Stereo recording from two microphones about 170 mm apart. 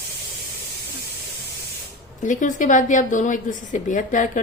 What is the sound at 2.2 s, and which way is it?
A woman's voice, 50° left (ahead or behind).